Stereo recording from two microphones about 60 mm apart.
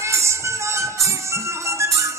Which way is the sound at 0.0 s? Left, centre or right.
Right.